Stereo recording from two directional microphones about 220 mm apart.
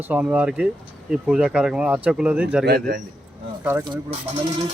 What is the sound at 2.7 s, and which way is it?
Speech, 45° right (ahead or behind).